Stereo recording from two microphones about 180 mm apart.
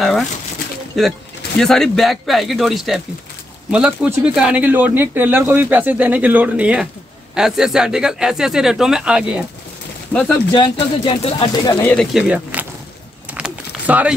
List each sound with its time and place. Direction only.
1.0 s speech: centre (ahead or behind)
10.1 s speech: 10° left (ahead or behind)
10.5 s speech: 30° left (ahead or behind)
11.4 s speech: 20° left (ahead or behind)
11.9 s speech: centre (ahead or behind)
13.3 s a sound: 10° right (ahead or behind)